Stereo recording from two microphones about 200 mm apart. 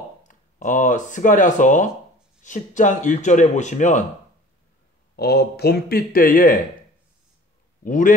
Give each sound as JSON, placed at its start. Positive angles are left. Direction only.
{"t": 0.3, "sound": "speech", "side_deg": 40}
{"t": 5.1, "sound": "speech", "side_deg": 50}
{"t": 7.8, "sound": "a man's voice", "side_deg": 40}